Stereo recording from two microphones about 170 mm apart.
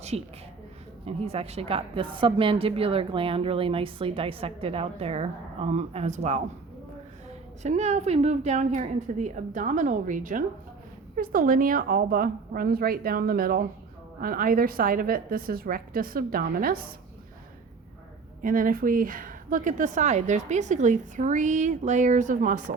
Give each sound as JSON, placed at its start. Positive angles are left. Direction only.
{"t": 0.1, "sound": "a woman's voice", "side_deg": -35}
{"t": 7.6, "sound": "speech", "side_deg": -40}
{"t": 18.4, "sound": "speech", "side_deg": -55}